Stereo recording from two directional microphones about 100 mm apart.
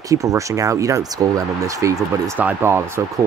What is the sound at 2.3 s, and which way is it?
Speech, 20° right (ahead or behind).